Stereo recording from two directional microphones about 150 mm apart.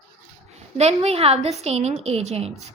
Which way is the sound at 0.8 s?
45° right (ahead or behind).